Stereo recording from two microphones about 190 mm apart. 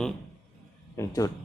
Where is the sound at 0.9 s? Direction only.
20° left (ahead or behind).